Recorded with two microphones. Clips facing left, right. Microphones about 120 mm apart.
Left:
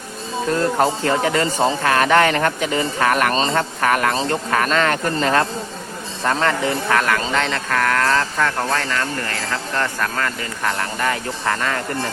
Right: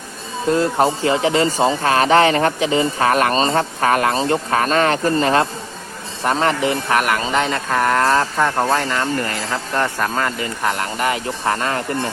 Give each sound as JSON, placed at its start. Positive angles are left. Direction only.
{"t": 0.5, "sound": "speech", "side_deg": -20}